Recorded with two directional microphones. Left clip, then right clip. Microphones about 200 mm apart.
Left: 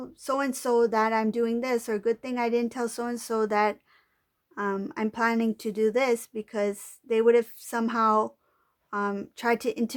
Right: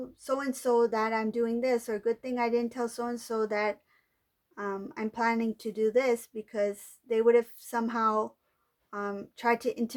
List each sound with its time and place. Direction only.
0.1 s speech: 35° left (ahead or behind)